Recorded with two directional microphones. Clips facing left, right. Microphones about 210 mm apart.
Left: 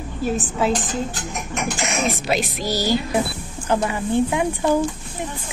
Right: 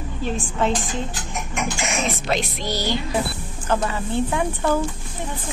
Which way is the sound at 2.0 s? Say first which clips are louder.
Left 2 dB; 5° left (ahead or behind).